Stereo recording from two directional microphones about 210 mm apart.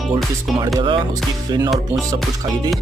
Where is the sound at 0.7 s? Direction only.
25° right (ahead or behind).